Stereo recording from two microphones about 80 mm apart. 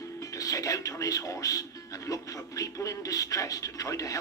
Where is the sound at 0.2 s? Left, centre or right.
Left.